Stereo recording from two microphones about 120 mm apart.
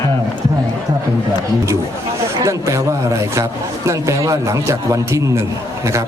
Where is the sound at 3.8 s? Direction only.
25° right (ahead or behind).